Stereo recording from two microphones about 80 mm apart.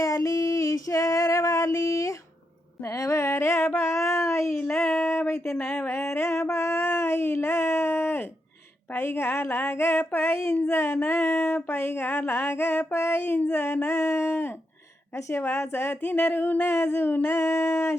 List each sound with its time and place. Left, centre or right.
0.0 s female singing: left
2.8 s music: left
3.8 s a sound: left